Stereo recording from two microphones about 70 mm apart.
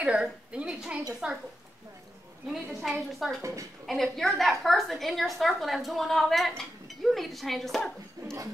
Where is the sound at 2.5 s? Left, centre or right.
Centre.